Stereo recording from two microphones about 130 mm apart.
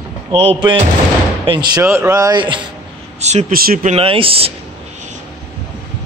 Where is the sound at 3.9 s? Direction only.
45° right (ahead or behind).